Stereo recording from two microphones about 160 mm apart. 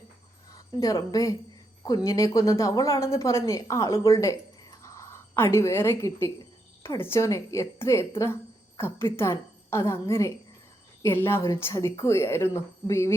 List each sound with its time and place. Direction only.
0.8 s a woman's voice: 20° left (ahead or behind)